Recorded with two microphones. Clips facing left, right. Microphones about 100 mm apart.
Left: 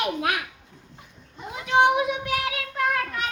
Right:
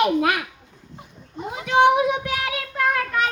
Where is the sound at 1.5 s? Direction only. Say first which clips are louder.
Right 3 dB; 60° right (ahead or behind).